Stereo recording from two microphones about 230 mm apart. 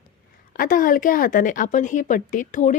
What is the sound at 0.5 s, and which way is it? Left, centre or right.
A woman's voice, left.